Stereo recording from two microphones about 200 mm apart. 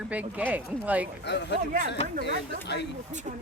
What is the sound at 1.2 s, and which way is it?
Speech, 60° left (ahead or behind).